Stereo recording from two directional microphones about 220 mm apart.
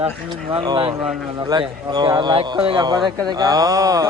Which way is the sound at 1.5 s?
20° right (ahead or behind).